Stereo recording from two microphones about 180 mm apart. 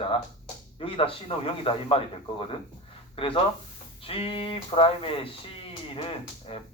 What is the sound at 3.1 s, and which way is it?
Speech, 30° left (ahead or behind).